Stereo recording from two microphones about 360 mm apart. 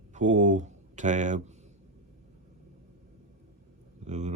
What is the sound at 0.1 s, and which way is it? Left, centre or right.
A man's voice, centre.